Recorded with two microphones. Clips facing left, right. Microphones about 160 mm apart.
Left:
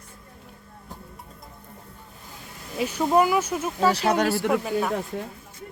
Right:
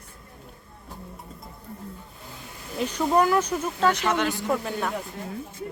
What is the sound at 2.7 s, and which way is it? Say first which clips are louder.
Speech: left 1 dB; 10° left (ahead or behind).